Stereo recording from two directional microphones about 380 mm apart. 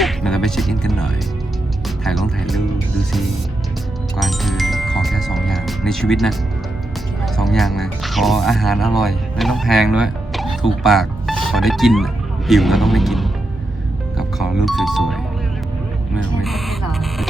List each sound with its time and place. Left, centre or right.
0.0 s music: centre
4.2 s music: centre
7.3 s speech: centre
16.1 s a sound: centre